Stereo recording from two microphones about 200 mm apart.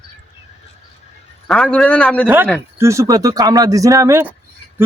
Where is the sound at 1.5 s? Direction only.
5° left (ahead or behind).